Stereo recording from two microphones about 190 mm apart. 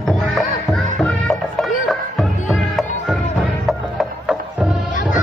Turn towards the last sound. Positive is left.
turn(degrees=-5)  # may be behind; listen again after turning